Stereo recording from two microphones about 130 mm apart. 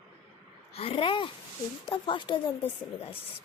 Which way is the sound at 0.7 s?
50° left (ahead or behind).